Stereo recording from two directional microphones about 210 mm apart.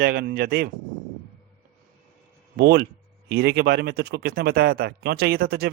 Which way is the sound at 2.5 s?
50° right (ahead or behind).